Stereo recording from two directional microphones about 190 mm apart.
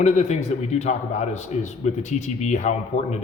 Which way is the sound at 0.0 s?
35° left (ahead or behind).